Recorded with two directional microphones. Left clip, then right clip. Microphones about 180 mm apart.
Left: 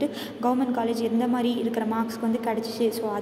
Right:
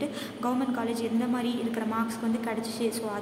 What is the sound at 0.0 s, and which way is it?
A woman's voice, 15° left (ahead or behind).